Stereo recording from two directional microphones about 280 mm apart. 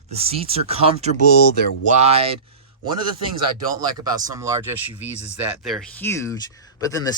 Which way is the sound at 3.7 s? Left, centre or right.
Centre.